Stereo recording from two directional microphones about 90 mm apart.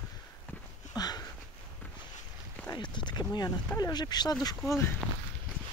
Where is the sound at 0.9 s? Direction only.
50° left (ahead or behind).